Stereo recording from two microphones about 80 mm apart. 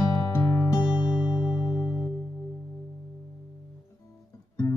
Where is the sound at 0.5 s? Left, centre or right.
Left.